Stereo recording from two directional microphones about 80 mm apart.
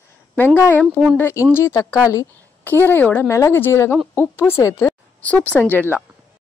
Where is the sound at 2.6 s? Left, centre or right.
Left.